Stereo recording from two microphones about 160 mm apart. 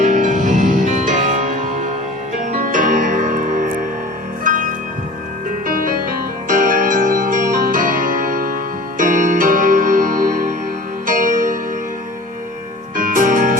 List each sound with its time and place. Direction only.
0.0 s music: 50° right (ahead or behind)
13.0 s music: 55° right (ahead or behind)